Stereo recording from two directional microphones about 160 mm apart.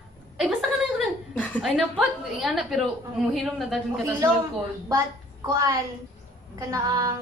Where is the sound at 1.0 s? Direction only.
10° left (ahead or behind).